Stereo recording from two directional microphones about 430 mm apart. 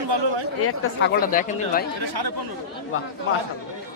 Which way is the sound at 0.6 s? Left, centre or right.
Left.